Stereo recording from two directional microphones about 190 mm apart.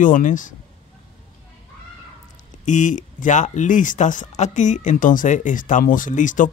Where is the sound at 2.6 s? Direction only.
40° left (ahead or behind).